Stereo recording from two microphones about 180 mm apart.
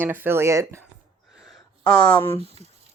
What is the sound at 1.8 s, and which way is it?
Speech, 15° left (ahead or behind).